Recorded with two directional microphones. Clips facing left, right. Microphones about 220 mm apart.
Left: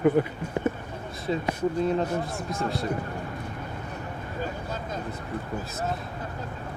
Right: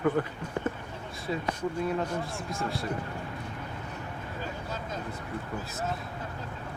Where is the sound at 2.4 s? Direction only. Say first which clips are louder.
Left 4 dB; 20° left (ahead or behind).